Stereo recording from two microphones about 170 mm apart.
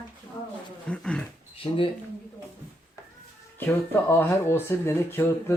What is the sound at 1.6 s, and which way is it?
Speech, 30° left (ahead or behind).